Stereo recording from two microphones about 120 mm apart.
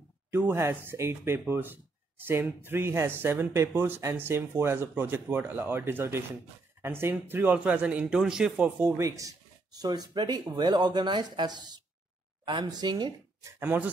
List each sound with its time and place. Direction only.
0.3 s speech: 20° right (ahead or behind)
8.8 s speech: 25° right (ahead or behind)
13.6 s speech: 15° right (ahead or behind)